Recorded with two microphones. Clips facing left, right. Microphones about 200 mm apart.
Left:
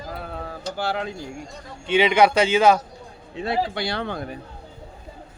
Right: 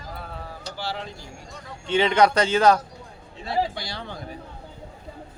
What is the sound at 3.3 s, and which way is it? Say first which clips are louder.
Speech: left 2 dB; 65° left (ahead or behind).